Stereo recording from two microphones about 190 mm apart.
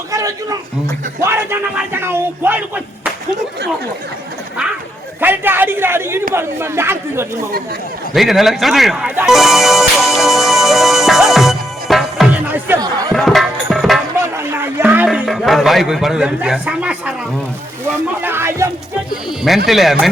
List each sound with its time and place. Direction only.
0.1 s a sound: 15° right (ahead or behind)
1.2 s speech: 10° right (ahead or behind)
5.2 s speech: 10° right (ahead or behind)
8.1 s speech: centre (ahead or behind); by 13.1 s 20° right (ahead or behind)
13.1 s music: centre (ahead or behind)
14.3 s speech: 10° right (ahead or behind)
18.2 s speech: 10° right (ahead or behind)
19.1 s speech: centre (ahead or behind)